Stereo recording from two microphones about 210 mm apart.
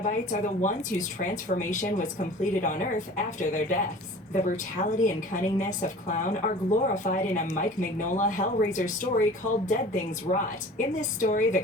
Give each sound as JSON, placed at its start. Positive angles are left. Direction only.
{"t": 0.0, "sound": "a woman's voice", "side_deg": 35}